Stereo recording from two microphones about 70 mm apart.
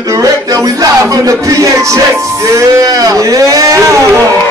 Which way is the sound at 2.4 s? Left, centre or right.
Right.